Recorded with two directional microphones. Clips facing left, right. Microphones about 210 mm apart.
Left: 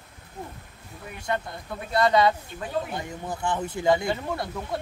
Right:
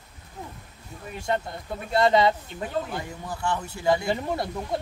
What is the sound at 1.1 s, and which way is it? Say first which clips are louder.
Speech: right 2 dB; 25° right (ahead or behind).